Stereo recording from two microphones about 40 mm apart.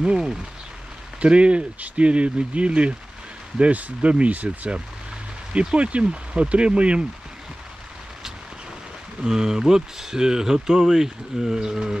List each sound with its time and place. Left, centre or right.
0.0 s speech: centre
1.2 s speech: right
9.2 s speech: centre